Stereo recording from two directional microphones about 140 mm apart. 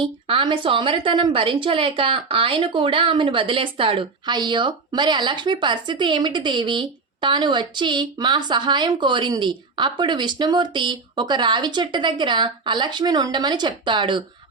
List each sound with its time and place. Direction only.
0.0 s a woman's voice: 40° right (ahead or behind)